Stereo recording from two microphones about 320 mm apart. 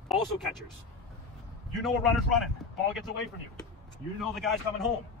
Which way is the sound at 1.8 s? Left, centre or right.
Centre.